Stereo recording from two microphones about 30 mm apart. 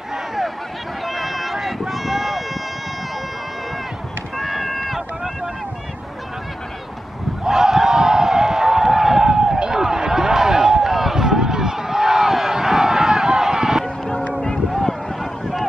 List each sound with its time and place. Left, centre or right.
1.0 s run: centre
4.4 s run: centre
7.4 s a sound: centre
14.7 s run: centre